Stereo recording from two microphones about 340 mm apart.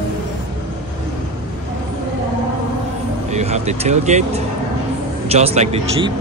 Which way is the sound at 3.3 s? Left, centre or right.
Centre.